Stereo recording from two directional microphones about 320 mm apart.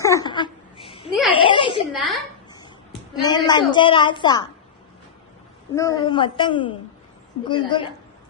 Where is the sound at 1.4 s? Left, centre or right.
Centre.